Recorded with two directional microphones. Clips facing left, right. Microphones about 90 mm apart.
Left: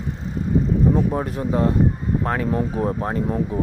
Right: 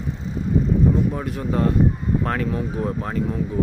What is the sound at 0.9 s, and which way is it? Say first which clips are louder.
Speech: left 2 dB; 35° left (ahead or behind).